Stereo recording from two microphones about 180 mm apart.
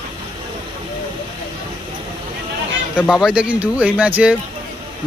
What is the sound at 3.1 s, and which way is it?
A man's voice, 5° right (ahead or behind).